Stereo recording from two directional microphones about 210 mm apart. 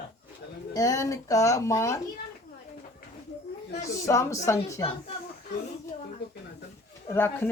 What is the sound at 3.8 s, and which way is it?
A woman's voice, 15° left (ahead or behind).